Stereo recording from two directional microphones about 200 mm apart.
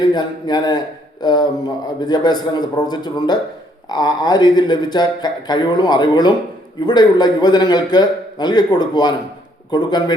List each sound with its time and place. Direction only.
0.0 s speech: 20° left (ahead or behind)